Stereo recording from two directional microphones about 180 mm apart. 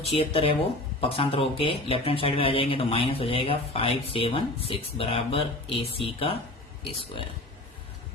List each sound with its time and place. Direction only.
0.0 s a man's voice: 35° left (ahead or behind)